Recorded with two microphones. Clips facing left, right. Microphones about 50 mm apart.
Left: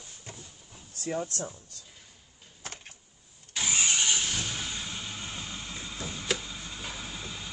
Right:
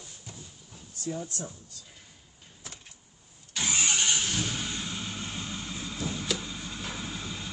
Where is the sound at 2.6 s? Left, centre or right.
Left.